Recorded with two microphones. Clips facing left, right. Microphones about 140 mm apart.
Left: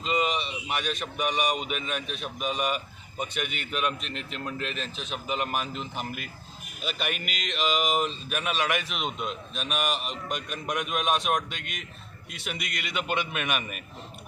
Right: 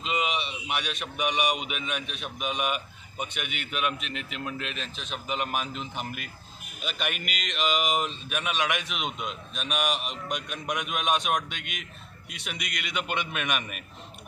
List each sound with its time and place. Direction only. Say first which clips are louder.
0.0 s speech: left 2 dB; centre (ahead or behind)